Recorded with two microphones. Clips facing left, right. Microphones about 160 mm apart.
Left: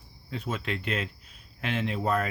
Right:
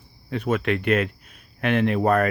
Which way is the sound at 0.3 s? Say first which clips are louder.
Right 10 dB; 70° right (ahead or behind).